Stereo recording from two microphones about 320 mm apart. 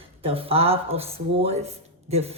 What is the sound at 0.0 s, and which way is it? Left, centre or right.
Speech, centre.